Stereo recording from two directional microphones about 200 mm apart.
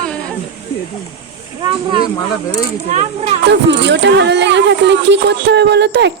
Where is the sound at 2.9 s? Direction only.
30° right (ahead or behind).